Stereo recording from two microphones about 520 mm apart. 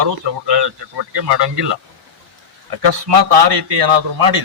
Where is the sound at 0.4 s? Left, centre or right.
Right.